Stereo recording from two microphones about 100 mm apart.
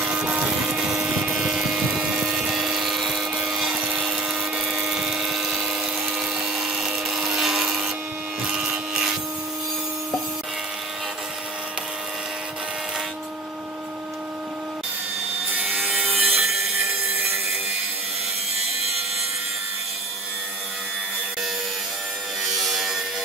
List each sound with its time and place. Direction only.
0.0 s vehicle: 5° right (ahead or behind)
8.4 s wood: 5° right (ahead or behind)
16.0 s wood: 15° right (ahead or behind)
16.4 s a sound: 5° right (ahead or behind)
16.9 s sawing: 20° right (ahead or behind)
18.6 s wood: 90° right
22.4 s wood: centre (ahead or behind)